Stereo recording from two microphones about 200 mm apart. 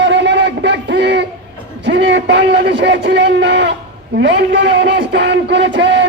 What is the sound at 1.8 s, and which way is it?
A man's voice, 65° right (ahead or behind).